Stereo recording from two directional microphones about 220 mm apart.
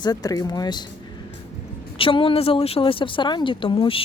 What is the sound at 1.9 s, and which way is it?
Speech, 25° left (ahead or behind).